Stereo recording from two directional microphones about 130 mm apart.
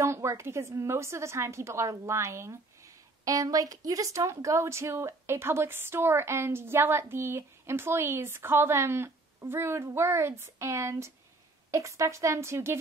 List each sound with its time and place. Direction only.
0.0 s a woman's voice: 20° right (ahead or behind)